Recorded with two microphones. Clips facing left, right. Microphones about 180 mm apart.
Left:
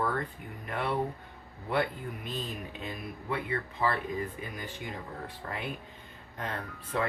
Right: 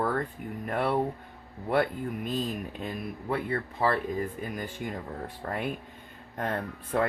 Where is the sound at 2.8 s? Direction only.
40° right (ahead or behind).